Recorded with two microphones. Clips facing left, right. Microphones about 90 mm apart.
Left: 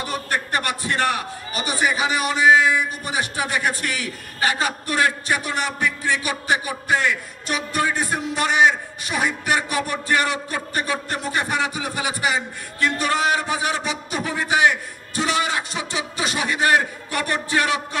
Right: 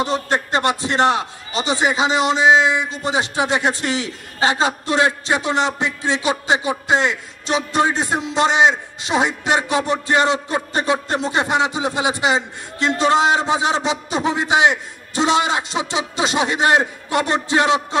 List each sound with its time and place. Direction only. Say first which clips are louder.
0.0 s a man's voice: right 6 dB; 25° right (ahead or behind)